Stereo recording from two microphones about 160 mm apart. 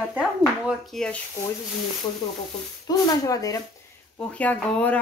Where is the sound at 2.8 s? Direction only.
25° left (ahead or behind).